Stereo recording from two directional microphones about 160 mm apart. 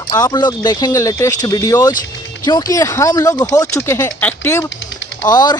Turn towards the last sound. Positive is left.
turn(degrees=25)  # may be behind; listen again after turning